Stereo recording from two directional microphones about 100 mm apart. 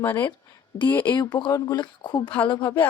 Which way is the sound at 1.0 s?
45° left (ahead or behind).